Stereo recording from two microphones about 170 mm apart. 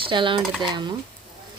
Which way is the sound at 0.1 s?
30° right (ahead or behind).